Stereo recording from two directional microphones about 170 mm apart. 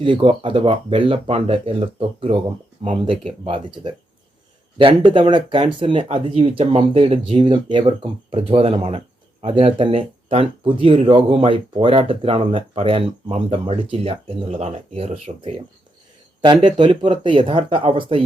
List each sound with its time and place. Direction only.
0.0 s speech: 30° right (ahead or behind)
16.6 s speech: 30° right (ahead or behind)